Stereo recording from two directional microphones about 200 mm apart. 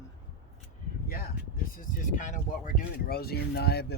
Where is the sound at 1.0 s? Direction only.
50° left (ahead or behind).